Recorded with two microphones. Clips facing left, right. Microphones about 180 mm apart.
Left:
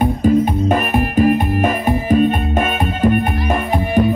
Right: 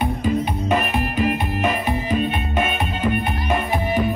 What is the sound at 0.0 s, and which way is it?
Music, 45° left (ahead or behind).